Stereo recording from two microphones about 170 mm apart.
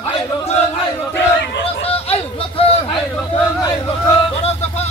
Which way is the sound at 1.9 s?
35° left (ahead or behind).